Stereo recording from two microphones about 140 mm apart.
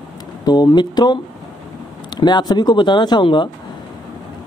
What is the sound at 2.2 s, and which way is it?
Speech, 30° left (ahead or behind).